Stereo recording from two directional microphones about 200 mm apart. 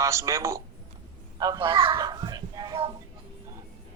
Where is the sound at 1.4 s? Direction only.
20° right (ahead or behind).